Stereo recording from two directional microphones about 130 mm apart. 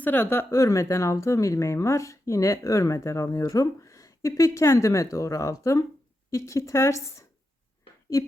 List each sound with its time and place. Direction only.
0.0 s a woman's voice: 15° left (ahead or behind)